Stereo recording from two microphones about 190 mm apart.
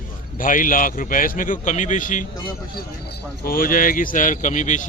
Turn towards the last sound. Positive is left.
turn(degrees=40)  # may be behind; listen again after turning